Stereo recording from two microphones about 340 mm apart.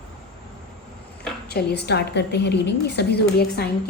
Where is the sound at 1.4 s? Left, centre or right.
Left.